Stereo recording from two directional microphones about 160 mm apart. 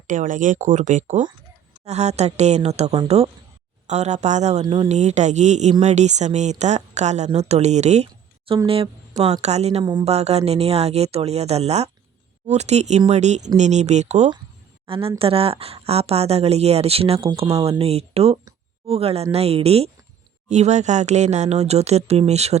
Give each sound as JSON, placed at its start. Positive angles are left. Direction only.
{"t": 0.1, "sound": "speech", "side_deg": -55}
{"t": 4.6, "sound": "speech", "side_deg": -30}
{"t": 4.9, "sound": "speech", "side_deg": -45}
{"t": 14.8, "sound": "speech", "side_deg": -35}